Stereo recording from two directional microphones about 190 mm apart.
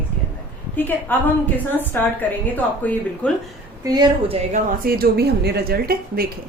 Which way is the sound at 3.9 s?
20° right (ahead or behind).